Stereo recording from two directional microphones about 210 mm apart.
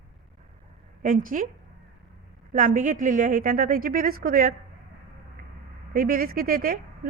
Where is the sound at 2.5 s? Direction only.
40° right (ahead or behind).